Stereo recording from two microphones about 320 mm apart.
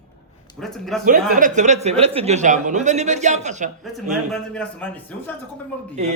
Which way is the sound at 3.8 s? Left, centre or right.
Centre.